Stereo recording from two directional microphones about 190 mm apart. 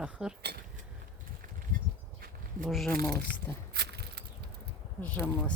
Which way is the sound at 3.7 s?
60° right (ahead or behind).